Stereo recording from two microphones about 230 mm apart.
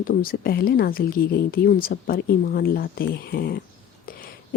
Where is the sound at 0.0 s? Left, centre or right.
Left.